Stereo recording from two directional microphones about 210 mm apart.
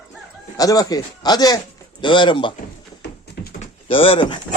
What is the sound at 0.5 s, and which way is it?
Speech, 15° left (ahead or behind).